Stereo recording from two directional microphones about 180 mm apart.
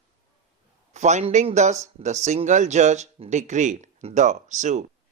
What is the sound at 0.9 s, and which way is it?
Speech, 40° right (ahead or behind).